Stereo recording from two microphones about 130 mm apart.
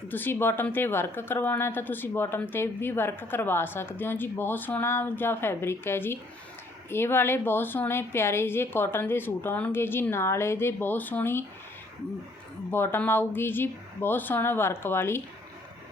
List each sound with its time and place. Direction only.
0.1 s speech: 15° left (ahead or behind)
12.7 s speech: 15° left (ahead or behind)